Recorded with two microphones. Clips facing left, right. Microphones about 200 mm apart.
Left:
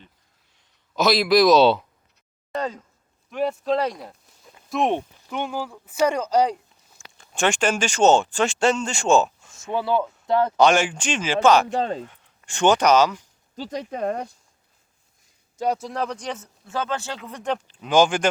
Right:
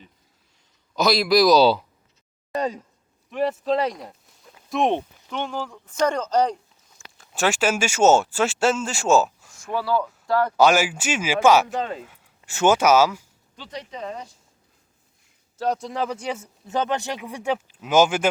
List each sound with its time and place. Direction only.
0.9 s speech: centre (ahead or behind)
2.6 s speech: 15° right (ahead or behind)
3.2 s speech: centre (ahead or behind)
7.2 s speech: 5° right (ahead or behind)
9.5 s speech: 25° left (ahead or behind)
10.6 s speech: 5° right (ahead or behind)
11.7 s speech: 35° left (ahead or behind)
11.9 s speech: 5° right (ahead or behind)
13.6 s speech: 45° left (ahead or behind)
15.5 s speech: 10° left (ahead or behind)
15.9 s speech: centre (ahead or behind)
16.6 s speech: 20° right (ahead or behind)